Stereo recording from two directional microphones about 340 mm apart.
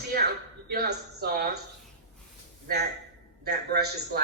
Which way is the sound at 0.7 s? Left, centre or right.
Right.